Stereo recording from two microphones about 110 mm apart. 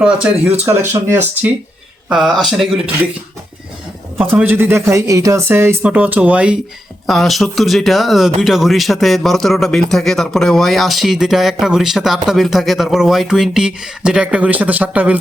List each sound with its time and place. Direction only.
0.0 s speech: 5° right (ahead or behind)
0.6 s speech: 20° right (ahead or behind)
2.0 s speech: centre (ahead or behind)
4.2 s speech: 15° right (ahead or behind)
7.1 s speech: centre (ahead or behind)